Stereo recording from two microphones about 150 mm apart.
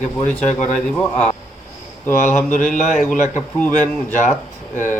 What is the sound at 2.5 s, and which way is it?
Speech, 55° left (ahead or behind).